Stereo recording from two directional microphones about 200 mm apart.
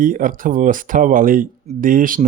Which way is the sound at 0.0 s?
45° right (ahead or behind).